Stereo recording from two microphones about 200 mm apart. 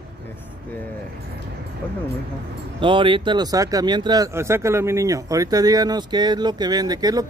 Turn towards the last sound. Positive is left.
turn(degrees=-20)  # may be behind; listen again after turning